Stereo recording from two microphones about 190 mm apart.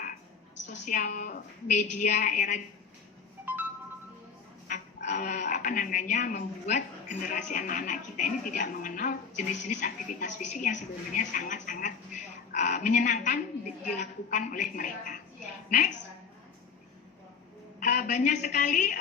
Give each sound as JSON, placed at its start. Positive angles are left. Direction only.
{"t": 0.7, "sound": "a woman's voice", "side_deg": 45}
{"t": 3.4, "sound": "telephone dialing", "side_deg": -10}
{"t": 4.7, "sound": "a woman's voice", "side_deg": 40}
{"t": 17.7, "sound": "a woman's voice", "side_deg": 45}